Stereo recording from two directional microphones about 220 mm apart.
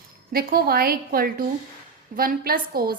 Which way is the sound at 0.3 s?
45° right (ahead or behind).